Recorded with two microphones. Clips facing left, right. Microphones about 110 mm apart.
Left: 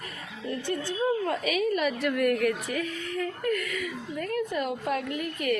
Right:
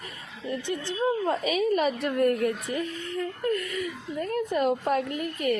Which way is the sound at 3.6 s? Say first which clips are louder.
Right 1 dB; 30° right (ahead or behind).